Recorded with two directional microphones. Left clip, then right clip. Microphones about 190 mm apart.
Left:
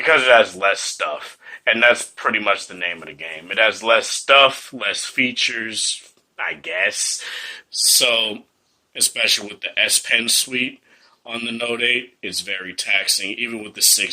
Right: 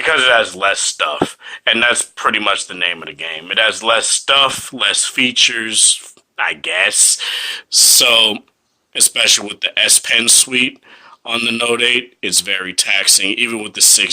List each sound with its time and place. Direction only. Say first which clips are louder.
0.0 s speech: right 1 dB; 20° right (ahead or behind); by 14.1 s 45° right (ahead or behind)